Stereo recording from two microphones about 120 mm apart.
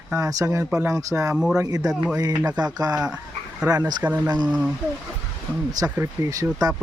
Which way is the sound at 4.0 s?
15° right (ahead or behind).